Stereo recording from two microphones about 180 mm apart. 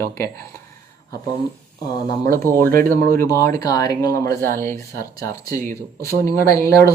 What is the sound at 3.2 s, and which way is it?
Speech, 15° left (ahead or behind).